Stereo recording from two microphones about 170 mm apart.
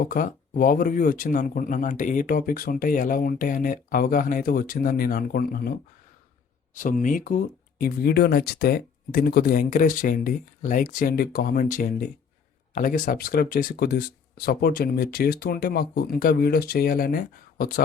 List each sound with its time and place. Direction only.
0.0 s speech: 55° left (ahead or behind)
7.0 s speech: 50° left (ahead or behind)